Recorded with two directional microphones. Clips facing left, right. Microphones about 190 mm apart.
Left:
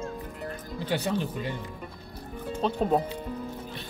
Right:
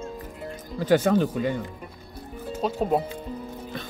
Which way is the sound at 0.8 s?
45° right (ahead or behind).